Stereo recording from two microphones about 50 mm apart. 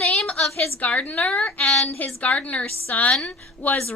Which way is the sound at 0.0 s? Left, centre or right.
Left.